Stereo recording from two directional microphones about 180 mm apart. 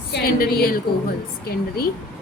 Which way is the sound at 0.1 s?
55° left (ahead or behind).